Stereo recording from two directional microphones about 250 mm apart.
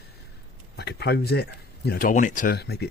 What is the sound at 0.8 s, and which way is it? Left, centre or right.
Speech, left.